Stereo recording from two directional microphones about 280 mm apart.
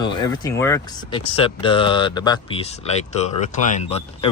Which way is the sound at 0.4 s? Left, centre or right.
Centre.